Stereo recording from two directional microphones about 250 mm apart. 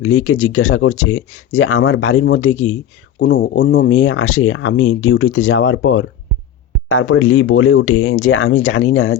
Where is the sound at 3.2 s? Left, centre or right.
Left.